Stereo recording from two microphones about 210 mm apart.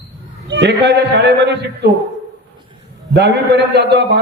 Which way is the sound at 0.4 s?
55° right (ahead or behind).